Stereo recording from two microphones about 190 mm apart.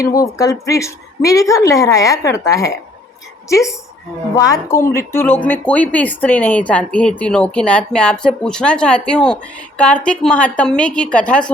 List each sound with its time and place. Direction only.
0.2 s speech: 15° left (ahead or behind)